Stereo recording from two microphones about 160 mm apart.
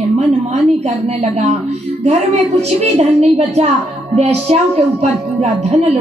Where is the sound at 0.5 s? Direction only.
45° right (ahead or behind).